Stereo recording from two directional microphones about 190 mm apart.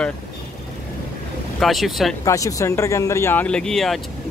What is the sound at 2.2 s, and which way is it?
Speech, 15° left (ahead or behind).